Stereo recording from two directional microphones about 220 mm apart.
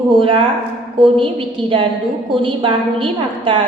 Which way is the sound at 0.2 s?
25° right (ahead or behind).